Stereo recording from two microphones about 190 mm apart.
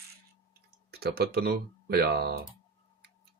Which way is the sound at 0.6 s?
55° right (ahead or behind).